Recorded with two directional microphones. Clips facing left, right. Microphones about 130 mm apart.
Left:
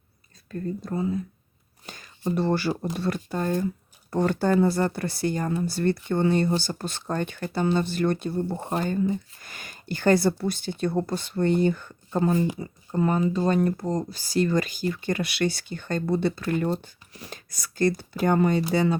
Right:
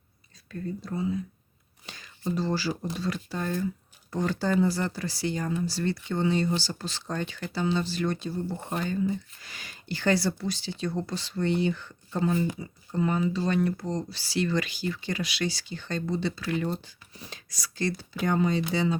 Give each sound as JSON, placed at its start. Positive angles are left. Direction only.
{"t": 0.8, "sound": "speech", "side_deg": 50}
{"t": 4.1, "sound": "speech", "side_deg": 55}